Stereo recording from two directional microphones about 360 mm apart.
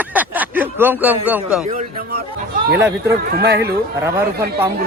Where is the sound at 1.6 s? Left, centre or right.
Right.